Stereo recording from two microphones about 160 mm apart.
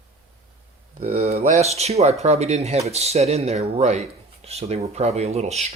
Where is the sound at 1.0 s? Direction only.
50° right (ahead or behind).